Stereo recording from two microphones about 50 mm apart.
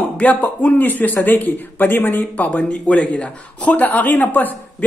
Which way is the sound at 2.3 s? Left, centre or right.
Left.